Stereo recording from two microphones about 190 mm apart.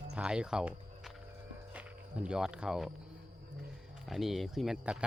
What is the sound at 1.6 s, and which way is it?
Music, 5° right (ahead or behind).